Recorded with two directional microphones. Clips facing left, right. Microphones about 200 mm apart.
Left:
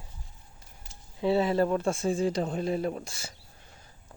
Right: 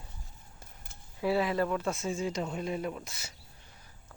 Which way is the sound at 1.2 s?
25° left (ahead or behind).